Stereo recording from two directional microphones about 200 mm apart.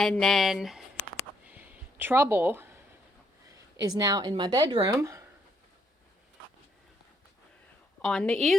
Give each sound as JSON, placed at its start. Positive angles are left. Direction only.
{"t": 0.0, "sound": "speech", "side_deg": 0}
{"t": 1.5, "sound": "a sound", "side_deg": -10}
{"t": 3.5, "sound": "a woman's voice", "side_deg": -20}
{"t": 8.0, "sound": "speech", "side_deg": 5}